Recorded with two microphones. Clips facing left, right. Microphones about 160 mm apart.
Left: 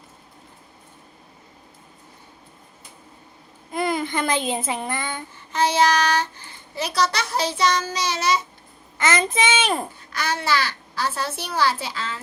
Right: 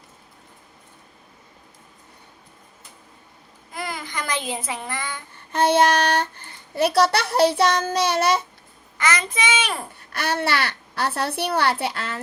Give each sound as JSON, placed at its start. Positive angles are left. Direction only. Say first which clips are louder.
{"t": 3.7, "sound": "a child's voice", "louder": "left 8 dB", "side_deg": 25}
{"t": 5.5, "sound": "a child's voice", "louder": "right 2 dB", "side_deg": -60}
{"t": 9.0, "sound": "a child's voice", "louder": "left 3 dB", "side_deg": 25}
{"t": 10.1, "sound": "a child's voice", "louder": "right 1 dB", "side_deg": -60}